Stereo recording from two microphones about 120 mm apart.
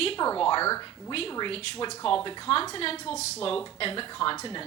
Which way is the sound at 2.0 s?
45° left (ahead or behind).